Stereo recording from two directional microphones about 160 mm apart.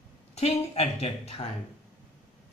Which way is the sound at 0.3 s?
40° left (ahead or behind).